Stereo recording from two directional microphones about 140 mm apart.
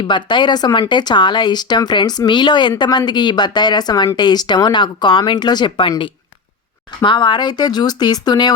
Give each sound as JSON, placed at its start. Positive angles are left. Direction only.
{"t": 0.1, "sound": "speech", "side_deg": 35}
{"t": 7.0, "sound": "speech", "side_deg": 35}